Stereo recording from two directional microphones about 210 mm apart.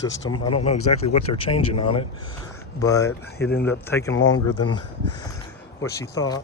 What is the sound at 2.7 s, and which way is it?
Speech, 15° left (ahead or behind).